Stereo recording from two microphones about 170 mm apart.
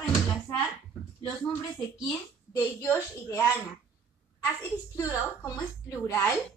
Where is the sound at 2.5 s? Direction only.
15° left (ahead or behind).